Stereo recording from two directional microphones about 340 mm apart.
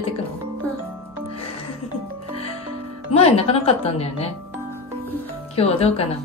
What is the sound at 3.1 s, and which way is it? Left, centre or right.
A woman's voice, centre.